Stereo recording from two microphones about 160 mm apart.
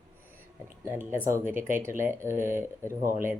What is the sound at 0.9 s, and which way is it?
Speech, 15° right (ahead or behind).